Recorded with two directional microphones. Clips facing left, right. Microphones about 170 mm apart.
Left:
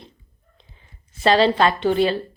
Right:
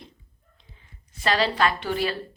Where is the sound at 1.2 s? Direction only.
30° left (ahead or behind).